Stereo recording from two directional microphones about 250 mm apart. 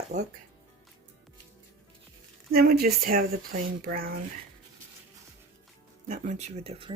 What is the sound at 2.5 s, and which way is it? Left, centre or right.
Speech, right.